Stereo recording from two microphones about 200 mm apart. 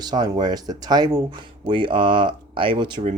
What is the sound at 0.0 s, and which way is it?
Speech, 20° right (ahead or behind).